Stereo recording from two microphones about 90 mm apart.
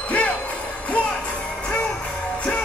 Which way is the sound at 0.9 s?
15° left (ahead or behind).